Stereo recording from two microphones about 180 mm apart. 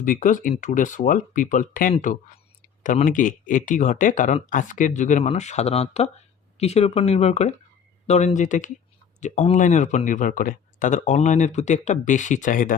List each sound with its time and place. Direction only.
0.0 s speech: 45° left (ahead or behind)